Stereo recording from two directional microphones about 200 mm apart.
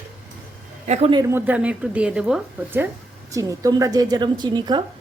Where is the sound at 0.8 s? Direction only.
30° right (ahead or behind).